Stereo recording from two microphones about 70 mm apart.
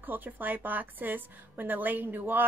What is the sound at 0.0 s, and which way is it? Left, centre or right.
Speech, right.